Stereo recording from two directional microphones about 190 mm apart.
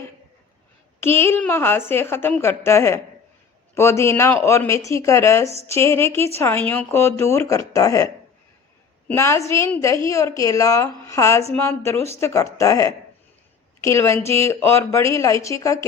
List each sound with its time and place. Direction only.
1.0 s a woman's voice: 10° left (ahead or behind)